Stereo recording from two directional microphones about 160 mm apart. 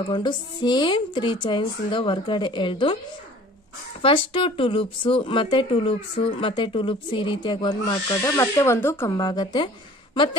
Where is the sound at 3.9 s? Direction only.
35° left (ahead or behind).